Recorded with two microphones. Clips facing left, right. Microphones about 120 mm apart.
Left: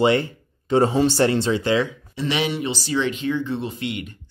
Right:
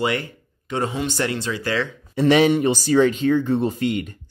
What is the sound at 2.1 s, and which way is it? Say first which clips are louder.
Speech: right 10 dB; 50° right (ahead or behind).